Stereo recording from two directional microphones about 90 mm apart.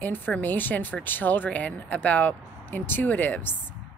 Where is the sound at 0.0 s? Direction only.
20° left (ahead or behind).